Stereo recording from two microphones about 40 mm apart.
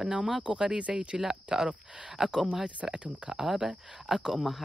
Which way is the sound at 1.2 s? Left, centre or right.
Centre.